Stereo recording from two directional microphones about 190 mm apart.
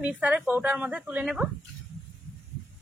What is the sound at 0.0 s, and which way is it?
A woman's voice, 5° right (ahead or behind).